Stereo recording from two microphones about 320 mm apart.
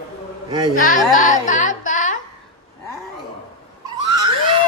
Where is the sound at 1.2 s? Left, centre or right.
Left.